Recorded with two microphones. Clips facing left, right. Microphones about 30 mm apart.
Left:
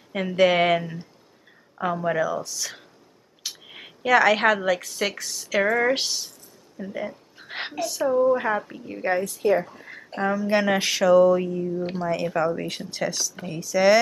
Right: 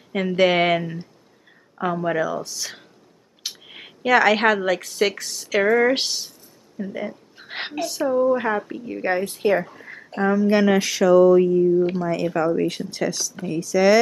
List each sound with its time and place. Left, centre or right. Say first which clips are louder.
0.1 s a woman's voice: right 1 dB; centre
7.3 s a woman's voice: right 2 dB; centre
9.2 s a woman's voice: right 1 dB; right
9.8 s speech: right 4 dB; centre